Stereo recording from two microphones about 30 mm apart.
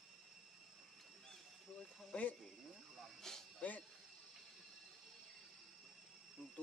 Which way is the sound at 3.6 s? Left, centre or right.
Left.